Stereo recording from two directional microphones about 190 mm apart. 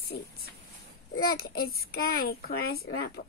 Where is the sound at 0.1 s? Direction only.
50° left (ahead or behind).